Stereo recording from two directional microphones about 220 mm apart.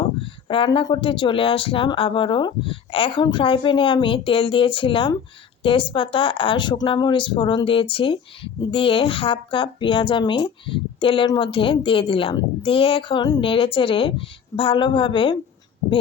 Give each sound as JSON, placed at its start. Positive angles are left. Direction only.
{"t": 0.0, "sound": "speech", "side_deg": 25}